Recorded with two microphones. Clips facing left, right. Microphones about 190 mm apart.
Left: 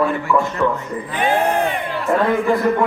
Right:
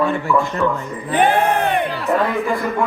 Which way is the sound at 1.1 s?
60° right (ahead or behind).